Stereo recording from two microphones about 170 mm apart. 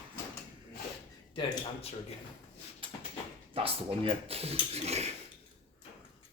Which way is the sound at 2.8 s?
30° right (ahead or behind).